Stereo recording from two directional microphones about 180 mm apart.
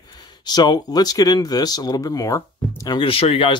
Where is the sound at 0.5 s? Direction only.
20° left (ahead or behind).